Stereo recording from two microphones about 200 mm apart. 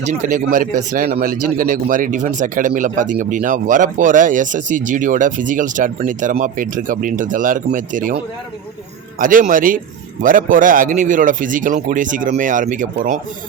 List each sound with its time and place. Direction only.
0.0 s speech: 40° right (ahead or behind)